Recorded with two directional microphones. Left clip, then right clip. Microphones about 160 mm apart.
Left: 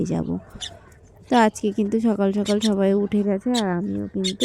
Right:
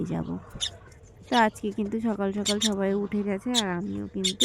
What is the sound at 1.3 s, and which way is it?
A woman's voice, 35° left (ahead or behind).